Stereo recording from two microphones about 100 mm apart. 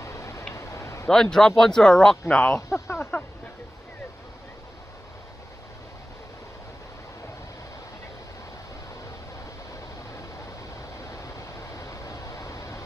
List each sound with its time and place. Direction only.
0.0 s tick-tock: 30° left (ahead or behind)
0.6 s a sound: 30° left (ahead or behind)
1.0 s speech: 5° left (ahead or behind)
2.7 s speech: 25° left (ahead or behind)
11.7 s vehicle: 30° left (ahead or behind)